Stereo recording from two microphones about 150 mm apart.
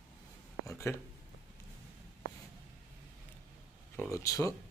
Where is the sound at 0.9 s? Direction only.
15° left (ahead or behind).